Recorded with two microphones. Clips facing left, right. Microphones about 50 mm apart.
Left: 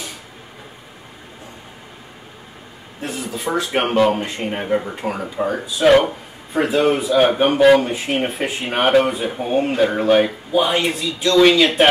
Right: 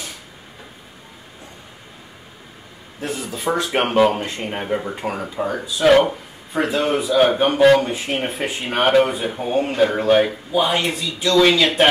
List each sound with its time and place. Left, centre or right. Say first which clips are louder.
3.0 s speech: even; centre